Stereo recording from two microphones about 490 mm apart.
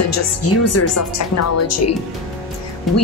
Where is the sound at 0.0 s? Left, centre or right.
Left.